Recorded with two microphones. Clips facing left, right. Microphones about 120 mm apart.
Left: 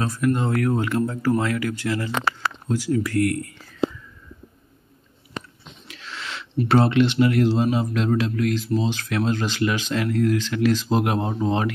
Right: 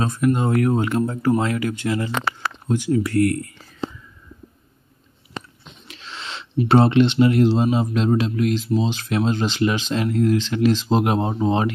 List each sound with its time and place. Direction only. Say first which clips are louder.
0.0 s speech: right 2 dB; 20° right (ahead or behind)
5.9 s a sound: even; 25° right (ahead or behind)
6.7 s speech: right 3 dB; 25° right (ahead or behind)